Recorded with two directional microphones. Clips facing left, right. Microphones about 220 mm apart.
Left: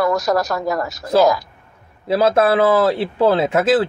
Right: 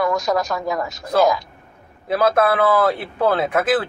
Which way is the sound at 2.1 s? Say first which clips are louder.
Left 2 dB; 25° left (ahead or behind).